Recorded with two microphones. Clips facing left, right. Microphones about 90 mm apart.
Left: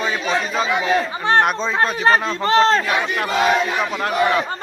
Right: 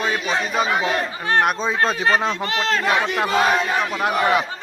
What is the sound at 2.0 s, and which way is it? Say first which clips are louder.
Speech: left 3 dB; 35° left (ahead or behind).